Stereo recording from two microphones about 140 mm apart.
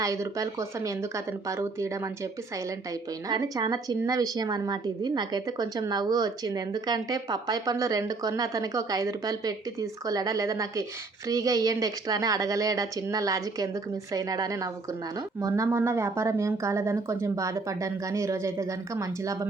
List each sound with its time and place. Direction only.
0.0 s a woman's voice: 20° right (ahead or behind)
3.2 s a woman's voice: 30° right (ahead or behind)